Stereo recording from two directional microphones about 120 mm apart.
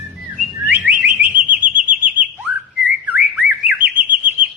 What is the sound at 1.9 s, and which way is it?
Chirp, 15° right (ahead or behind).